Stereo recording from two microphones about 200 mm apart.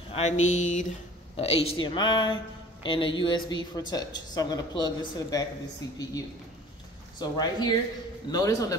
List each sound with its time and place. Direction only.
0.1 s speech: 35° left (ahead or behind); by 5.5 s 20° left (ahead or behind)
7.2 s a man's voice: 20° left (ahead or behind)